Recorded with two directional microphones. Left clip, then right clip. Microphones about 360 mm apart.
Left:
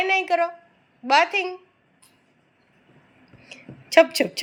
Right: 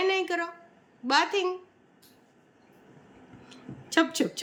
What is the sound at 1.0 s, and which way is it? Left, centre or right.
Speech, centre.